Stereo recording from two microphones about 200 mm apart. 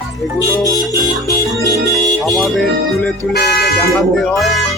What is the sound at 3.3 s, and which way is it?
Speech, 50° left (ahead or behind).